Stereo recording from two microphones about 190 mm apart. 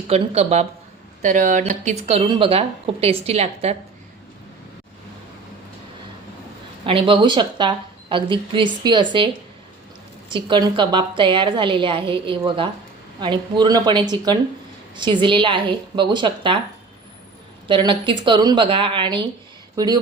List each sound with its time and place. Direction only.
0.1 s a woman's voice: 35° right (ahead or behind)
6.8 s speech: 30° right (ahead or behind)
10.3 s speech: 25° right (ahead or behind)
17.7 s speech: 25° right (ahead or behind)